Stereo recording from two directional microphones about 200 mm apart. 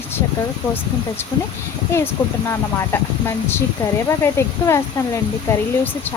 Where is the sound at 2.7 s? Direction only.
10° left (ahead or behind).